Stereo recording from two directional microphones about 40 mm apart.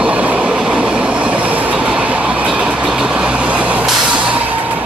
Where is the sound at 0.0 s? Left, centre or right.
Right.